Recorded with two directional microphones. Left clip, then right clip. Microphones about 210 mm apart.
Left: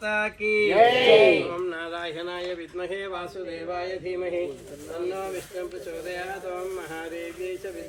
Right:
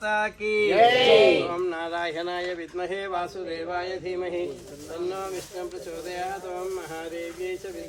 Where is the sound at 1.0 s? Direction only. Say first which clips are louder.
Left 1 dB; 5° right (ahead or behind).